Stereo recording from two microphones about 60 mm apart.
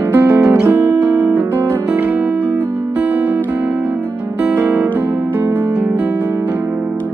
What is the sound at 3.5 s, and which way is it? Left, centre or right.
Music, right.